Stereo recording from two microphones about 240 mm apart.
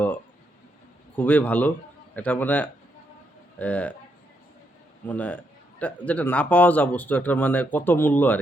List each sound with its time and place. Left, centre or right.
1.1 s speech: centre
5.0 s speech: centre